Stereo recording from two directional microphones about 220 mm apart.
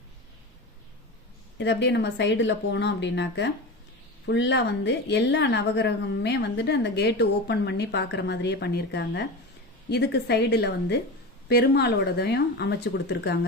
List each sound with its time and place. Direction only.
1.5 s a woman's voice: 50° left (ahead or behind)